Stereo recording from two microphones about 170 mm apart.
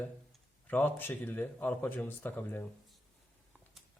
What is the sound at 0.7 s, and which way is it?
Speech, 10° left (ahead or behind).